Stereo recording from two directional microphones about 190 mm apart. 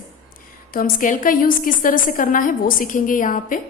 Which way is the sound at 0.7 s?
45° left (ahead or behind).